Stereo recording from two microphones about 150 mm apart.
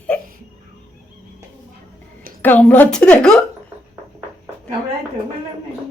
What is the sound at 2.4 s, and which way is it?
A woman's voice, 10° left (ahead or behind).